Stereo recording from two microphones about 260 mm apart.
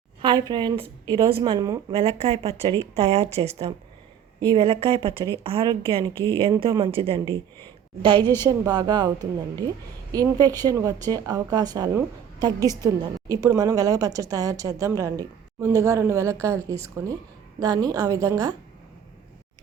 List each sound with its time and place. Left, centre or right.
0.2 s a woman's voice: centre